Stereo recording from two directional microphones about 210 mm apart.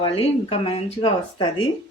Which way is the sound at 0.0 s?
25° left (ahead or behind).